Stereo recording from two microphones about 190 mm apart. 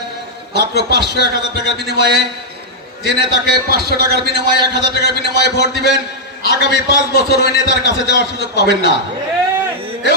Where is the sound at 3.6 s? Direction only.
55° right (ahead or behind).